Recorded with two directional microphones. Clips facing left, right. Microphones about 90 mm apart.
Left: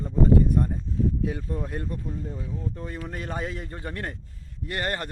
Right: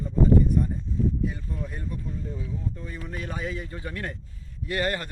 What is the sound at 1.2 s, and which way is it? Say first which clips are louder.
Speech: left 2 dB; 90° left.